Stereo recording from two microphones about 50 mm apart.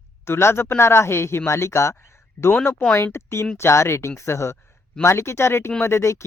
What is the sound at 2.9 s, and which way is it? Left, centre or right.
Speech, left.